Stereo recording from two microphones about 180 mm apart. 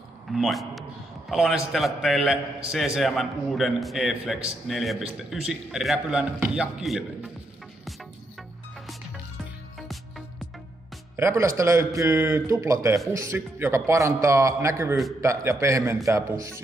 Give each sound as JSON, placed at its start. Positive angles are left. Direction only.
{"t": 0.3, "sound": "a man's voice", "side_deg": 0}
{"t": 9.8, "sound": "music", "side_deg": 0}
{"t": 11.1, "sound": "a man's voice", "side_deg": -15}